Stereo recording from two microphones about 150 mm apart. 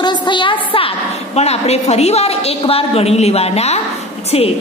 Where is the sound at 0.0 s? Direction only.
30° left (ahead or behind).